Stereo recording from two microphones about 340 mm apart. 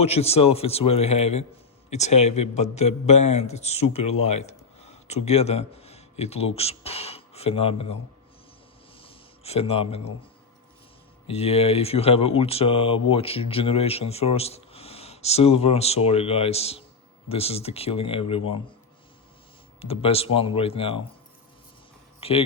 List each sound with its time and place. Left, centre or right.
0.0 s a man's voice: centre
9.0 s a sound: centre
11.3 s speech: centre
19.8 s speech: centre
22.2 s speech: centre